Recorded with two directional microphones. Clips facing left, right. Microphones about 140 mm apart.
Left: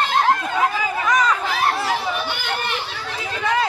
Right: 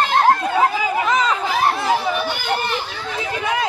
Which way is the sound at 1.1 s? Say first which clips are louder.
Left 2 dB; 25° right (ahead or behind).